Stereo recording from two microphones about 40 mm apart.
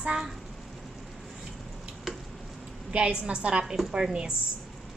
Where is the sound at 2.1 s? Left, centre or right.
Centre.